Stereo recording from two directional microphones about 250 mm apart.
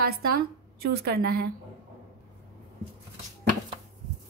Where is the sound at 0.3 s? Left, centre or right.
Right.